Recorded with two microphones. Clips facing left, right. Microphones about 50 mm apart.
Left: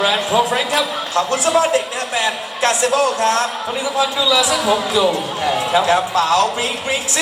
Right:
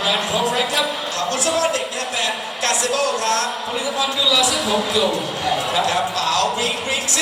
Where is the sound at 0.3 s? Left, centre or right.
Left.